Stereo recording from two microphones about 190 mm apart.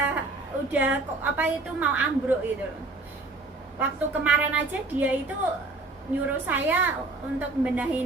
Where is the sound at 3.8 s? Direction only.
10° right (ahead or behind).